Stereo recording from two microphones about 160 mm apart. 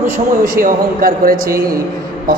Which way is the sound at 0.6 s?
60° right (ahead or behind).